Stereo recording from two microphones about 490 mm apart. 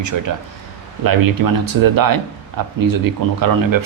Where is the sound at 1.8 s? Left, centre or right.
Right.